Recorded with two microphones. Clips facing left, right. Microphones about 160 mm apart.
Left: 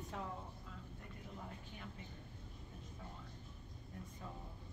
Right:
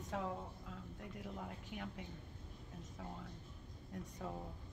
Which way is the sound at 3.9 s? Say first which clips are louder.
Right 4 dB; 80° right.